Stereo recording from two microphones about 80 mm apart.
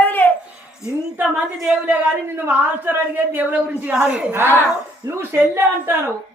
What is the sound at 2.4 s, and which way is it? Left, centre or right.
A woman's voice, right.